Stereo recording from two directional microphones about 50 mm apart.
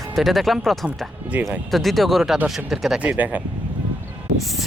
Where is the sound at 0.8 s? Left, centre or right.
Right.